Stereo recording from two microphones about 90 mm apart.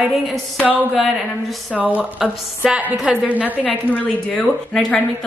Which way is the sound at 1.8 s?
15° right (ahead or behind).